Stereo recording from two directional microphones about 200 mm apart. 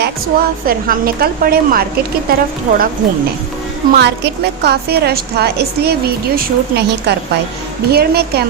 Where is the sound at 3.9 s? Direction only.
55° right (ahead or behind).